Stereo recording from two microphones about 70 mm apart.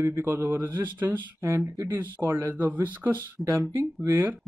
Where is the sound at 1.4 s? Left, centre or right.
Right.